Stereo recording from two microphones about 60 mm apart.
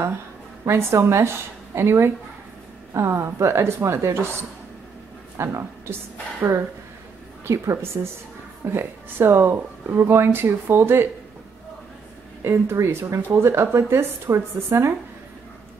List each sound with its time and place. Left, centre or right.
0.9 s speech: right
5.4 s speech: right
7.4 s speech: right
12.4 s speech: right